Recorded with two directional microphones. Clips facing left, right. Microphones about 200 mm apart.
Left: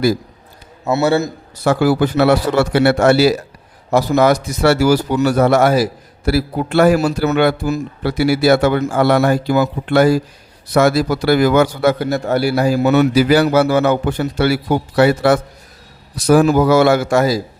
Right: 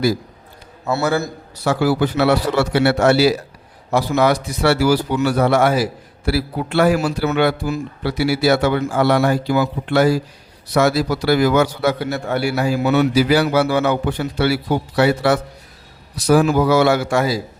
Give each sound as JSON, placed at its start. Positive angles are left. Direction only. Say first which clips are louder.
{"t": 0.9, "sound": "a man's voice", "louder": "left 4 dB", "side_deg": 20}
{"t": 1.6, "sound": "a man's voice", "louder": "left 3 dB", "side_deg": 50}